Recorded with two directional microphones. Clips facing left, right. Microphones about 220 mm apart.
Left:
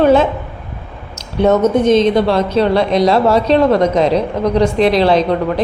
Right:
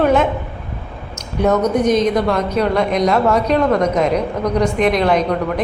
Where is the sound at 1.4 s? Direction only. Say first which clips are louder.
Left 4 dB; 25° left (ahead or behind).